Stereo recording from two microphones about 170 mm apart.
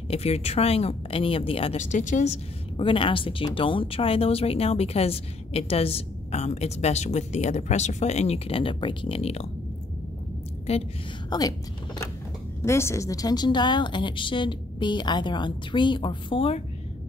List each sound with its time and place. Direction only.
0.1 s speech: 40° left (ahead or behind)
11.2 s a woman's voice: 25° left (ahead or behind)